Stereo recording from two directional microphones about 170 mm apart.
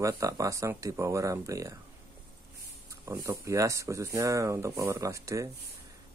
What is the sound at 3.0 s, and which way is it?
Speech, 15° right (ahead or behind).